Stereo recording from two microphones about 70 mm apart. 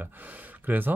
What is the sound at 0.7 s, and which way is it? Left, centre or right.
Speech, right.